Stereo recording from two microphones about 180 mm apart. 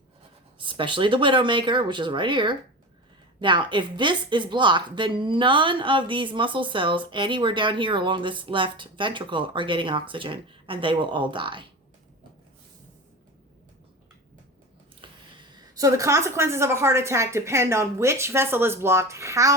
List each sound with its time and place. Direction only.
0.6 s a woman's voice: 30° right (ahead or behind)
15.0 s a sound: 30° right (ahead or behind)
15.7 s a woman's voice: 20° right (ahead or behind)